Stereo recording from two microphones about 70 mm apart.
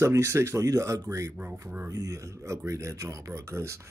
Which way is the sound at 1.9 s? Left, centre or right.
Right.